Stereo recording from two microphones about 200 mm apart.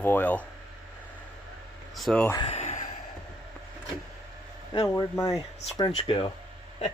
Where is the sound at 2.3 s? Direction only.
25° left (ahead or behind).